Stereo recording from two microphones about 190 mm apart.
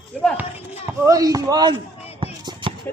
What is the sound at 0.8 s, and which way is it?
Speech, 15° right (ahead or behind).